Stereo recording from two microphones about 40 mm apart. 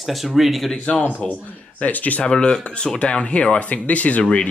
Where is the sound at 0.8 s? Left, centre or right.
Left.